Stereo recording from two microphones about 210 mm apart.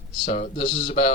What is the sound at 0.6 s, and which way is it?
Speech, 25° left (ahead or behind).